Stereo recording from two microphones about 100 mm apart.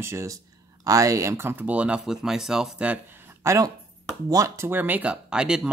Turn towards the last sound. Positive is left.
turn(degrees=-10)  # may be behind; listen again after turning